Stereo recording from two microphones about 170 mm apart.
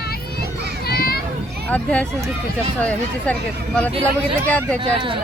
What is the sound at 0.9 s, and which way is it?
Children playing, 60° left (ahead or behind).